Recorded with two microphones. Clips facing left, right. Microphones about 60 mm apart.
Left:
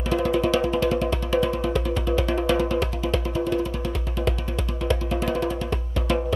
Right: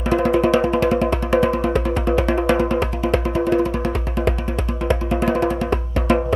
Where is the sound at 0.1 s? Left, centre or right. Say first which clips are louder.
Right 5 dB; right.